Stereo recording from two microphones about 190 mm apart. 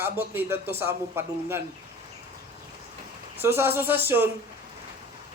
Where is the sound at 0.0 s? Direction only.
10° right (ahead or behind).